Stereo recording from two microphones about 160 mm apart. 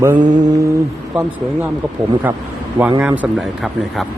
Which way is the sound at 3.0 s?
10° right (ahead or behind).